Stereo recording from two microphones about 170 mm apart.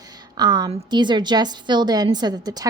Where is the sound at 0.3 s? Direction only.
25° right (ahead or behind).